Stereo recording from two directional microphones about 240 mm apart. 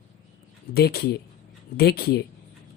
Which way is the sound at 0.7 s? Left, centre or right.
Left.